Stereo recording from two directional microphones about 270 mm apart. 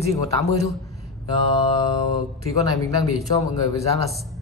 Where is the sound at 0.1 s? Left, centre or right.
Centre.